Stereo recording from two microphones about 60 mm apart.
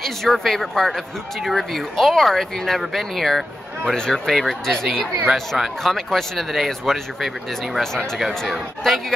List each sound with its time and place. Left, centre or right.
0.0 s speech: centre